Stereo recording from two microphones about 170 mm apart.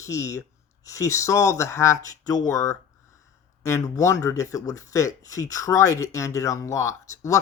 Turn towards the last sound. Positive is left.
turn(degrees=20)  # may be behind; listen again after turning